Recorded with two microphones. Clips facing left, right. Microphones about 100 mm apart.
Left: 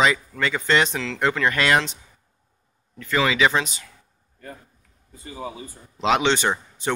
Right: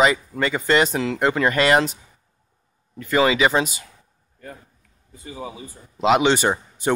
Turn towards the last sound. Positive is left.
turn(degrees=-10)  # may be behind; listen again after turning